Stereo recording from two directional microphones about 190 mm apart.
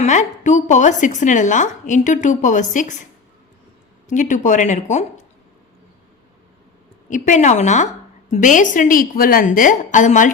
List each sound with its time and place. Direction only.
0.0 s a woman's voice: 40° left (ahead or behind)
4.1 s a woman's voice: 40° left (ahead or behind)
7.1 s a woman's voice: 40° left (ahead or behind)